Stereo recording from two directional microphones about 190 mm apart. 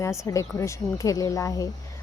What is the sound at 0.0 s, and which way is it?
Speech, 15° left (ahead or behind).